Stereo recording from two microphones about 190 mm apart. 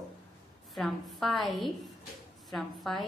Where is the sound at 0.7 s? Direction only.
Centre (ahead or behind).